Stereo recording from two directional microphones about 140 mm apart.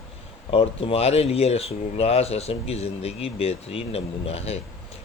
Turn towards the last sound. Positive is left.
turn(degrees=45)  # may be behind; listen again after turning